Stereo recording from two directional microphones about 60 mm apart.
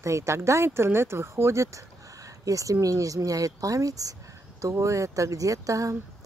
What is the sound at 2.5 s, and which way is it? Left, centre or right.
Speech, right.